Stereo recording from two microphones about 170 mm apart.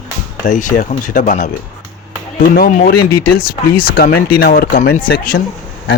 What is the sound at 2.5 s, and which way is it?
Speech, 60° left (ahead or behind).